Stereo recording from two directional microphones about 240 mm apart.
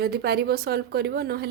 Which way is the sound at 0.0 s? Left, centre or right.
Right.